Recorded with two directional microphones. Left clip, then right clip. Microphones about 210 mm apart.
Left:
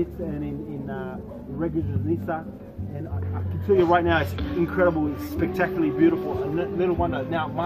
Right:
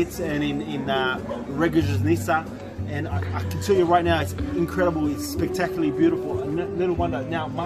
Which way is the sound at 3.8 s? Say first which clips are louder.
Even; 15° right (ahead or behind).